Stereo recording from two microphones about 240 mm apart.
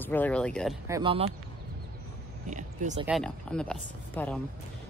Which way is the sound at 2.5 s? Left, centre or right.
Right.